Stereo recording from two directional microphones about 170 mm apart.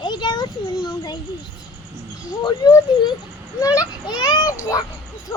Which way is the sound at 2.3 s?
25° left (ahead or behind).